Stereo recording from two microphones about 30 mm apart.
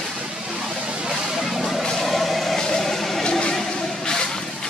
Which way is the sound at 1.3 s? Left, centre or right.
Centre.